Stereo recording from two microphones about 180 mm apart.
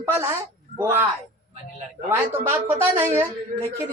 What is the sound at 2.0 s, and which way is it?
A woman's voice, 10° right (ahead or behind).